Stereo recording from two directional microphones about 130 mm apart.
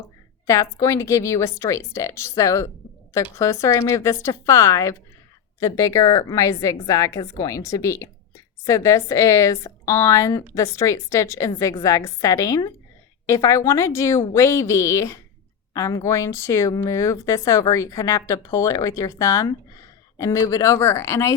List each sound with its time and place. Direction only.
0.4 s speech: 25° left (ahead or behind)